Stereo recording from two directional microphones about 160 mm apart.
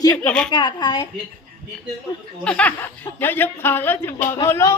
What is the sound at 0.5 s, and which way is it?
Speech, 30° left (ahead or behind).